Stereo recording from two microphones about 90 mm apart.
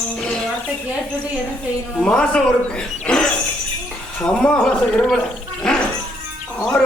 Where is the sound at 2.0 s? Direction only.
10° left (ahead or behind).